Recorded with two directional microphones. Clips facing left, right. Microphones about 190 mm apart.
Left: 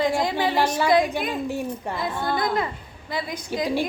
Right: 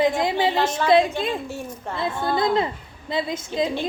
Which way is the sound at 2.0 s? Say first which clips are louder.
Right 4 dB; 25° right (ahead or behind).